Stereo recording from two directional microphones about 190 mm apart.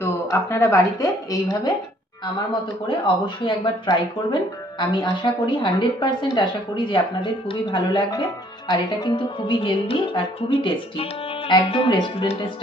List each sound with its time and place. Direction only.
0.0 s a woman's voice: 15° left (ahead or behind)
3.4 s a woman's voice: 25° left (ahead or behind)